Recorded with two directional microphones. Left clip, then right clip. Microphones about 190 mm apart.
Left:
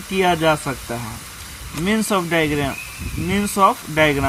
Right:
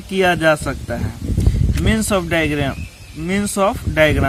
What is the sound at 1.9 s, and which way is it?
Speech, 35° right (ahead or behind).